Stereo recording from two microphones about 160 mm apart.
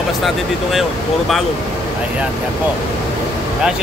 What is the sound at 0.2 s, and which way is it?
Speech, centre (ahead or behind).